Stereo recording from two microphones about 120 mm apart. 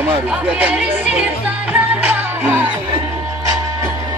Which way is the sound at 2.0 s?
15° right (ahead or behind).